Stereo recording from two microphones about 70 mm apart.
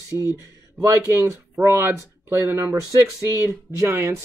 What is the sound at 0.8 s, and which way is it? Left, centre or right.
Speech, right.